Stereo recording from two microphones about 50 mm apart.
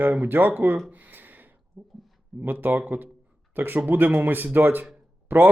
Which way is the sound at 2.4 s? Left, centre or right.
Right.